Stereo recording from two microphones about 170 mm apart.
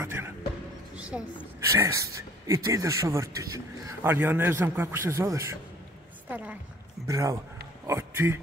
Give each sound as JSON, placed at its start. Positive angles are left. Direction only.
{"t": 0.0, "sound": "music", "side_deg": -15}
{"t": 0.9, "sound": "a sound", "side_deg": -5}
{"t": 1.7, "sound": "a woman's voice", "side_deg": -20}
{"t": 7.1, "sound": "a man's voice", "side_deg": -20}